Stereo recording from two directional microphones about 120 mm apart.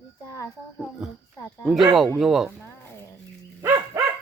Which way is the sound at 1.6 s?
Centre (ahead or behind).